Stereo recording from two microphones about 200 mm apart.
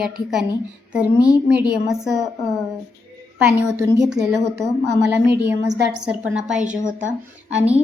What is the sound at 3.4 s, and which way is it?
A woman's voice, 5° right (ahead or behind).